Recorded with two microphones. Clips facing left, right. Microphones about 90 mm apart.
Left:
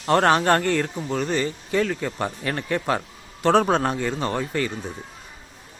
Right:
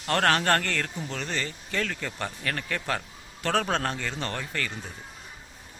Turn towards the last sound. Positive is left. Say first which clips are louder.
# left 8 dB
turn(degrees=15)  # may be behind; listen again after turning